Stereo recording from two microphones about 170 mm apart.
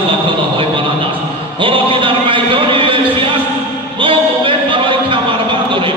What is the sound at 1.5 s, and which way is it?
A man's voice, 30° right (ahead or behind).